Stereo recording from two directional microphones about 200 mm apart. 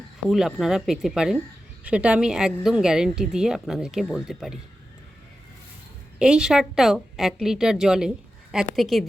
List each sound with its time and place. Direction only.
0.3 s a woman's voice: centre (ahead or behind)
6.1 s a woman's voice: 5° right (ahead or behind)